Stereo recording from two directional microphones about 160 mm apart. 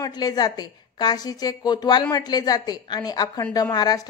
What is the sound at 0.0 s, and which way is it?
A woman's voice, 25° left (ahead or behind).